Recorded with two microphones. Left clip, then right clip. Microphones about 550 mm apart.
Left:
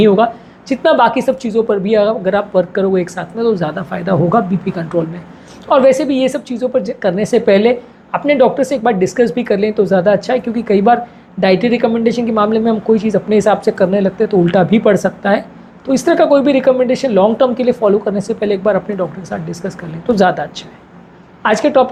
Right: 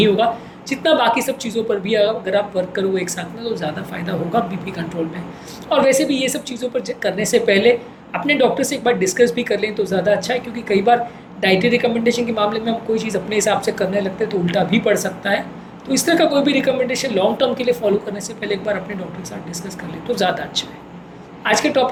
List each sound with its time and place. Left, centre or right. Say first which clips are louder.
0.7 s a woman's voice: left 5 dB; left